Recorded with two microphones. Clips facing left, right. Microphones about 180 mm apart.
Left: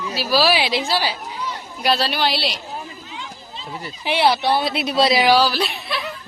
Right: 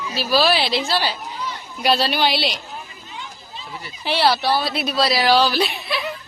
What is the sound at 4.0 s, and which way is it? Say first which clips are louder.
Speech: left 1 dB; 15° left (ahead or behind).